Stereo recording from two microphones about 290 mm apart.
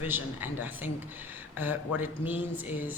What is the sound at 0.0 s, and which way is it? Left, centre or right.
Speech, centre.